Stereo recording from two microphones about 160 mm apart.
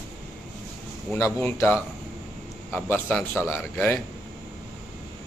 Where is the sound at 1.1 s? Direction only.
15° left (ahead or behind).